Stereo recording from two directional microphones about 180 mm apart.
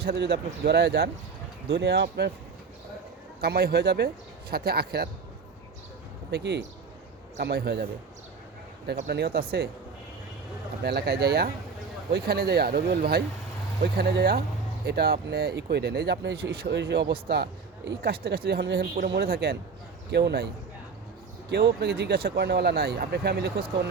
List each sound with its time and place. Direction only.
0.0 s speech: 65° right (ahead or behind)
1.7 s speech: 70° right (ahead or behind)
3.4 s speech: 60° right (ahead or behind)
6.3 s speech: 70° right (ahead or behind)
9.0 s speech: 60° right (ahead or behind)
10.8 s speech: 65° right (ahead or behind)
21.5 s speech: 65° right (ahead or behind)